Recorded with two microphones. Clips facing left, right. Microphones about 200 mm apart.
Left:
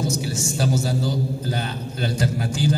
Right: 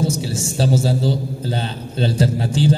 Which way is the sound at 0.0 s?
30° right (ahead or behind).